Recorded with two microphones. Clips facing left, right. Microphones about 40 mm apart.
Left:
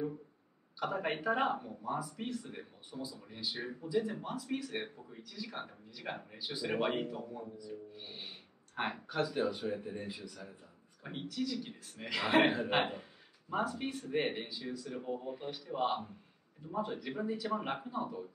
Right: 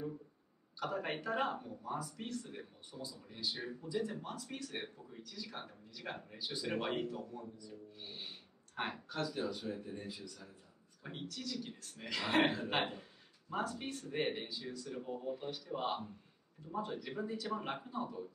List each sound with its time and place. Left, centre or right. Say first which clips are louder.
0.7 s speech: left 3 dB; centre